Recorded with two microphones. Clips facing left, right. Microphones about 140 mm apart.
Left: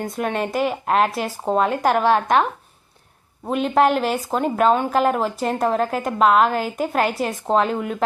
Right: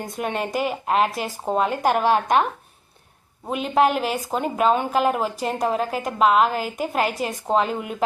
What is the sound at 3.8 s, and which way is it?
Speech, 40° left (ahead or behind).